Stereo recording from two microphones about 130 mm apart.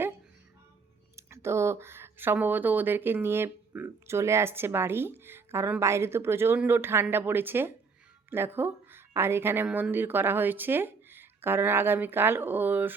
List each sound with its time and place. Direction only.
1.1 s a woman's voice: 20° right (ahead or behind)